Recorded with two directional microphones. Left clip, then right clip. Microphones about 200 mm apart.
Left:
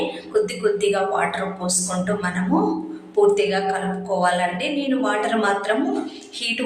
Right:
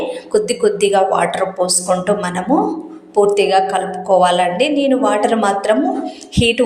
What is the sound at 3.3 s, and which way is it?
A woman's voice, 35° right (ahead or behind).